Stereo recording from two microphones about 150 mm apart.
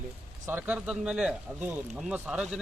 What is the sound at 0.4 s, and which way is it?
Speech, 10° right (ahead or behind).